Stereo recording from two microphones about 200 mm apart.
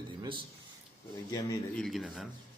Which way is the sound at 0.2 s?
25° right (ahead or behind).